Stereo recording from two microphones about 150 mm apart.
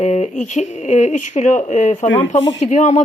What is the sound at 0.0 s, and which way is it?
Speech, 50° left (ahead or behind).